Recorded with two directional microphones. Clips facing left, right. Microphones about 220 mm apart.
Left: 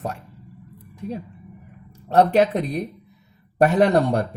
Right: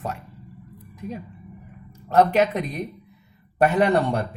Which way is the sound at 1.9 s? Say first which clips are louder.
Left 1 dB; 30° left (ahead or behind).